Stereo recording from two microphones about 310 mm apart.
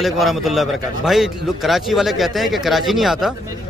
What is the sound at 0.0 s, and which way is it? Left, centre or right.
A man's voice, centre.